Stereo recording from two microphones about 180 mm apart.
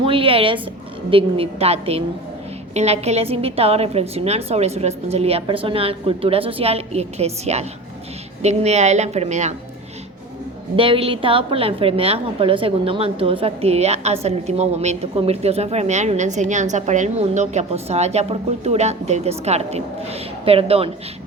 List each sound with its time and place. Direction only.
0.0 s a woman's voice: 30° right (ahead or behind)
10.8 s a woman's voice: 30° right (ahead or behind)